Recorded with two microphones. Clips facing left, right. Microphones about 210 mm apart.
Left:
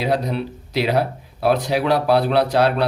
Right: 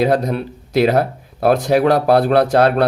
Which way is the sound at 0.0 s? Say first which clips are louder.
Right 5 dB; 50° right (ahead or behind).